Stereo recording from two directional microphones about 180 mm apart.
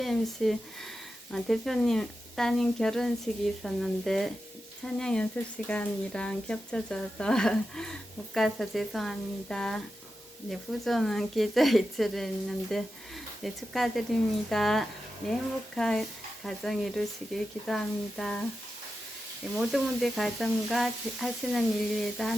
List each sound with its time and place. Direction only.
0.0 s speech: centre (ahead or behind)
19.5 s speech: centre (ahead or behind)